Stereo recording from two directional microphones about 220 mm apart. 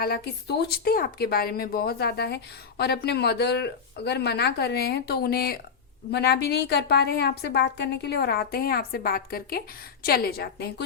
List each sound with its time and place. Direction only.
0.0 s speech: 45° left (ahead or behind)